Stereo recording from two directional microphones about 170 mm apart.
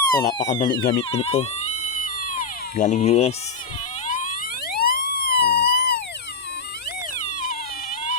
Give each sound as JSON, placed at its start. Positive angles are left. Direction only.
{"t": 0.2, "sound": "speech", "side_deg": 20}
{"t": 2.0, "sound": "cat", "side_deg": 50}
{"t": 4.1, "sound": "siren", "side_deg": 50}
{"t": 7.2, "sound": "a sound", "side_deg": 45}